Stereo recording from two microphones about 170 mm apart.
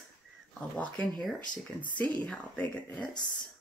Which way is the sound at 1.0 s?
Centre (ahead or behind).